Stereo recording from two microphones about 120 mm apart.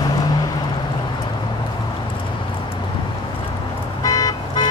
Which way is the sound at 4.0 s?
30° left (ahead or behind).